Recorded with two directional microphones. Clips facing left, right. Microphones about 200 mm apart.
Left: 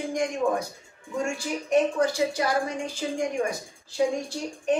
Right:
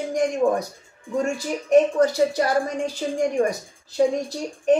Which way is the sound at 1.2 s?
40° right (ahead or behind).